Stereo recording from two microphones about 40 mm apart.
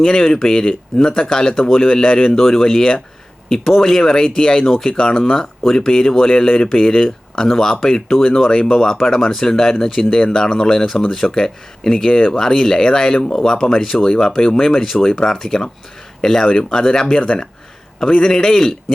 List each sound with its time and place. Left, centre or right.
0.0 s speech: centre
4.9 s speech: centre